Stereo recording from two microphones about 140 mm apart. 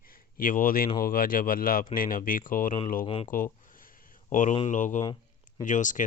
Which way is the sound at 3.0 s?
40° left (ahead or behind).